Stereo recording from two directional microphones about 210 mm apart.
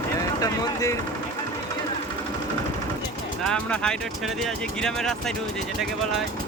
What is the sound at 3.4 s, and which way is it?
Speech, 5° left (ahead or behind).